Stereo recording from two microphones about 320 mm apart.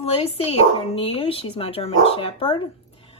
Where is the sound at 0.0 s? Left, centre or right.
Centre.